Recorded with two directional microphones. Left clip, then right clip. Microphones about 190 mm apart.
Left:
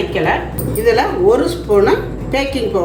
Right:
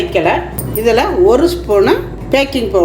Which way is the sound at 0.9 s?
50° right (ahead or behind).